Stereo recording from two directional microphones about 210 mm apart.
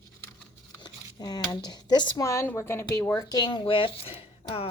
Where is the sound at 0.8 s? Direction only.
20° left (ahead or behind).